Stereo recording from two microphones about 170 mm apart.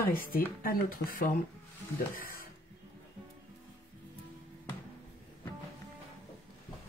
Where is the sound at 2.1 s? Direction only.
55° left (ahead or behind).